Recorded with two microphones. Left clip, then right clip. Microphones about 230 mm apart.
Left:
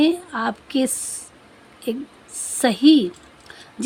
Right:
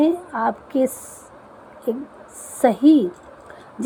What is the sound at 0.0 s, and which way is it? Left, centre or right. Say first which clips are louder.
Speech: right 1 dB; left.